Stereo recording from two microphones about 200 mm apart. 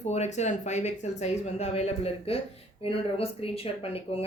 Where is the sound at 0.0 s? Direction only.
35° left (ahead or behind).